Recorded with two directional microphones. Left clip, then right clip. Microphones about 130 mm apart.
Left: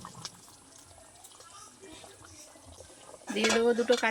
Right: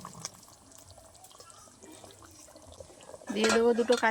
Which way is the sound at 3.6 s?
35° right (ahead or behind).